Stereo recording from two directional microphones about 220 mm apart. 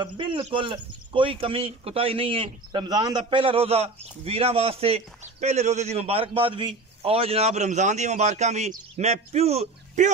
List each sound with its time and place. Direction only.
0.0 s speech: 20° right (ahead or behind)